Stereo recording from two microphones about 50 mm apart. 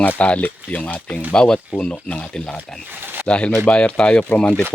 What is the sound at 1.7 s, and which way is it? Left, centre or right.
Speech, left.